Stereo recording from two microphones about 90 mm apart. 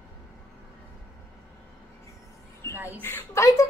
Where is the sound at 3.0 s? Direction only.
30° left (ahead or behind).